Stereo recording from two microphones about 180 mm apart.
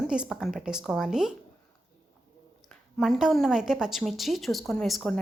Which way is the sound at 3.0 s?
Centre (ahead or behind).